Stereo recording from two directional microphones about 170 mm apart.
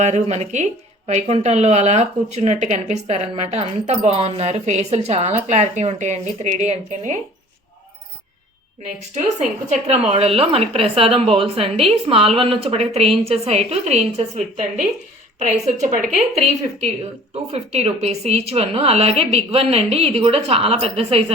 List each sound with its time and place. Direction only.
0.0 s speech: 40° right (ahead or behind)
8.8 s a woman's voice: 40° right (ahead or behind)
17.3 s speech: 40° right (ahead or behind)